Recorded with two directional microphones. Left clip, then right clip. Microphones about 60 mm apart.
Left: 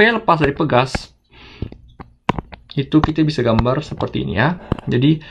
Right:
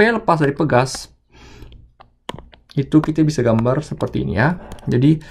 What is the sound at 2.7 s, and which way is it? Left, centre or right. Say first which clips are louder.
Speech: even; right.